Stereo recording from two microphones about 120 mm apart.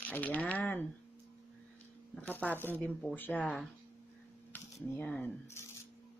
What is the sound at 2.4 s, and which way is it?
Speech, 15° left (ahead or behind).